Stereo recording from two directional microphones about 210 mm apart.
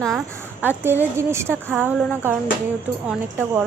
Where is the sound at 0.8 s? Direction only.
10° right (ahead or behind).